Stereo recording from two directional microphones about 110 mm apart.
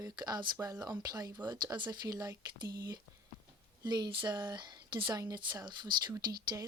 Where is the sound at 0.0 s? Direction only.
40° right (ahead or behind).